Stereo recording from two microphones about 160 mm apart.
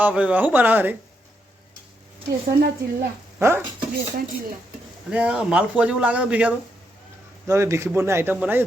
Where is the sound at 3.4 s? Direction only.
15° right (ahead or behind).